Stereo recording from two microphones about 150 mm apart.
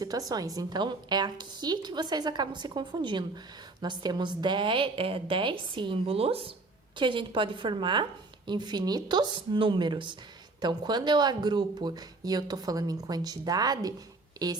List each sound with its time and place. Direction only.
0.0 s a woman's voice: 25° right (ahead or behind)